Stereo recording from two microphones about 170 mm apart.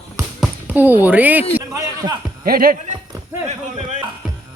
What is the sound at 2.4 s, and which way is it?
Speech, 60° right (ahead or behind).